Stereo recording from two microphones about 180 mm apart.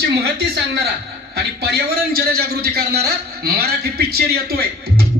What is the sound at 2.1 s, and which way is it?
A man's voice, 60° right (ahead or behind).